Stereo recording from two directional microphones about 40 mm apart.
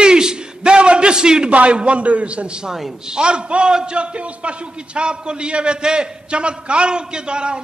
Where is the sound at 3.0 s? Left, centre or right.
Right.